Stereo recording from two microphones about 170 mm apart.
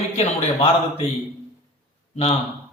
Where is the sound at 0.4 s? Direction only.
35° left (ahead or behind).